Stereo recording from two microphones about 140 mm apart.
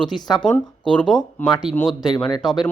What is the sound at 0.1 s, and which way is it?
Speech, 30° left (ahead or behind).